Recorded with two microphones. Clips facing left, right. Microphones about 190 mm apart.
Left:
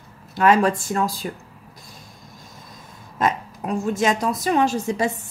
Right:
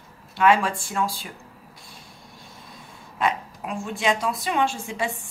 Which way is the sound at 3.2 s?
40° left (ahead or behind).